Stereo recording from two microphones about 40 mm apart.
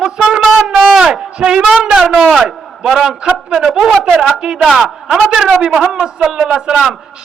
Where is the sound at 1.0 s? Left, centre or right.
Right.